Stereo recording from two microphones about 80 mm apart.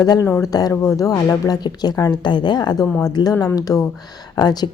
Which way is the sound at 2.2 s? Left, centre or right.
Left.